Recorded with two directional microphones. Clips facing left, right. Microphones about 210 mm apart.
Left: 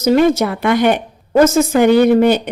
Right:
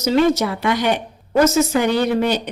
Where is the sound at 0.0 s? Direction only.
50° left (ahead or behind).